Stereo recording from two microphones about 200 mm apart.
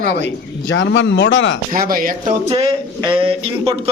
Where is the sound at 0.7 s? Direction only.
65° left (ahead or behind).